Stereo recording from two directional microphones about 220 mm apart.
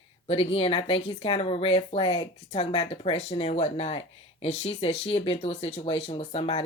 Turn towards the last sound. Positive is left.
turn(degrees=25)  # may be behind; listen again after turning